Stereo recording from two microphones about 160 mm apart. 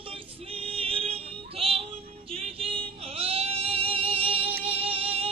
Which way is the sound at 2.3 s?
35° right (ahead or behind).